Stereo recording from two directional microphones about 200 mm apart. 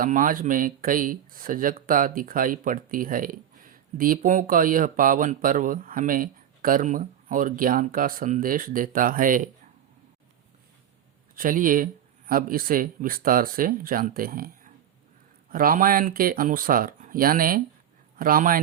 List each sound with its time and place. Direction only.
0.0 s speech: 45° right (ahead or behind)
11.3 s speech: 45° right (ahead or behind)